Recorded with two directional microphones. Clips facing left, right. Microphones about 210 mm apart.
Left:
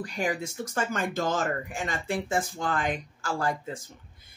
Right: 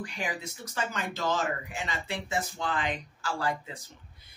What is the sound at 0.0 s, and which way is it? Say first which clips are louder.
Speech: left 6 dB; 40° left (ahead or behind).